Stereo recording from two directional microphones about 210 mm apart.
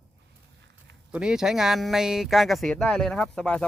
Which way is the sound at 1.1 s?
5° right (ahead or behind).